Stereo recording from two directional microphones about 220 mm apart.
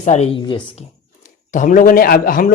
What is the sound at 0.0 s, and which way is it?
A man's voice, 30° left (ahead or behind).